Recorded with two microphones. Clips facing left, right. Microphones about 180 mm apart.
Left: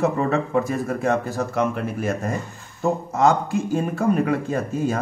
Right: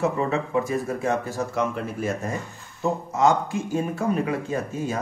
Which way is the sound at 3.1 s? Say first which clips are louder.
Left 1 dB; 55° left (ahead or behind).